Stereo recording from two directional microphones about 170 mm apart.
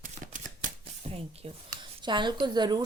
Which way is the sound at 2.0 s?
25° right (ahead or behind).